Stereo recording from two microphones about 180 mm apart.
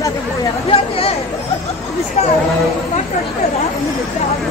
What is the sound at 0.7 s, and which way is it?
Speech, 30° left (ahead or behind).